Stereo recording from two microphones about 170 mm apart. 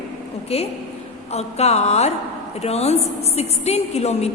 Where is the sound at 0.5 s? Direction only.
35° left (ahead or behind).